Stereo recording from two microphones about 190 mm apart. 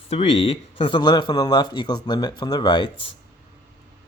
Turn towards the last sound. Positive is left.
turn(degrees=25)  # may be behind; listen again after turning